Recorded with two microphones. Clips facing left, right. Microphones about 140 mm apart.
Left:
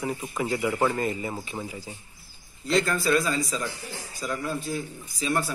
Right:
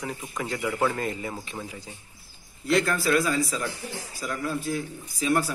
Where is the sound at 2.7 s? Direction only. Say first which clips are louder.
Even; 5° right (ahead or behind).